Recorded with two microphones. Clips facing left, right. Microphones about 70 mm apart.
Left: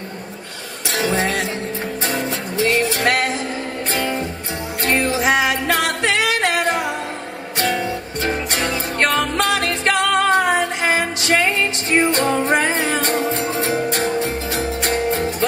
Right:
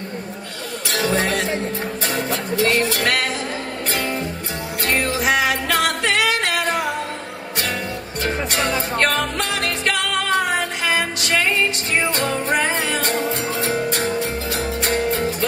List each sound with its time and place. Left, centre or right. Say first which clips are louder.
0.8 s music: left 1 dB; left
5.1 s music: left 2 dB; left